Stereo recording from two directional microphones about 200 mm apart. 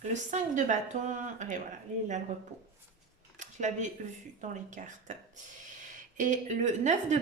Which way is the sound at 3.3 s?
35° right (ahead or behind).